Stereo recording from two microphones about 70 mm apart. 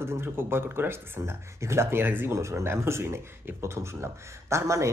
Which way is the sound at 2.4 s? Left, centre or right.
Right.